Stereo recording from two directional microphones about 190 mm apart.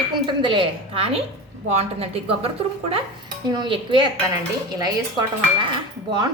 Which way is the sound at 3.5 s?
25° right (ahead or behind).